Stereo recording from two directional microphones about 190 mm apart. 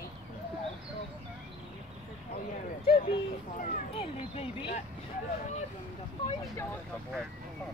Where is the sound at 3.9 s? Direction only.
30° left (ahead or behind).